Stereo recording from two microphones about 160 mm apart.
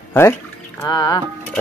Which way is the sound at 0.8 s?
25° left (ahead or behind).